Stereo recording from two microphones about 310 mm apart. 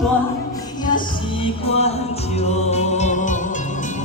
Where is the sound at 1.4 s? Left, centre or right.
Centre.